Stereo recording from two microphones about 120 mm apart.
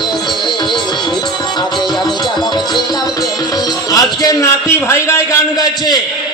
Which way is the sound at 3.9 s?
30° left (ahead or behind).